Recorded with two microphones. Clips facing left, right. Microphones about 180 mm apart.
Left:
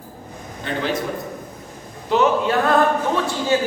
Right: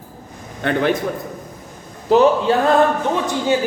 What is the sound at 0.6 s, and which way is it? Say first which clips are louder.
Speech: right 7 dB; 65° right (ahead or behind).